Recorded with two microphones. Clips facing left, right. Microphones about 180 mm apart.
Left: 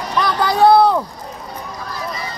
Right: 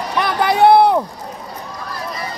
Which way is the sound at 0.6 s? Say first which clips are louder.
Right 1 dB; 20° right (ahead or behind).